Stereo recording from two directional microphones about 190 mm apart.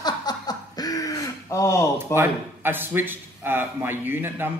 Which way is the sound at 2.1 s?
10° right (ahead or behind).